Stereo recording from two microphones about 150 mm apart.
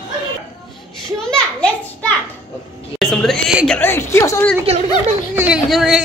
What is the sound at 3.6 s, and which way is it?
Speech, 15° left (ahead or behind).